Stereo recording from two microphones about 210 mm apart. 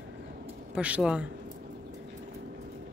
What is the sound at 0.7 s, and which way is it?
Speech, 5° right (ahead or behind).